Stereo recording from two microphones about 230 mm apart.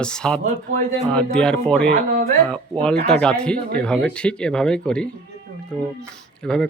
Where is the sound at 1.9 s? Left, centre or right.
Right.